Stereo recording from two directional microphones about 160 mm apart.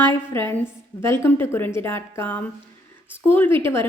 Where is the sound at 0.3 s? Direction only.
15° left (ahead or behind).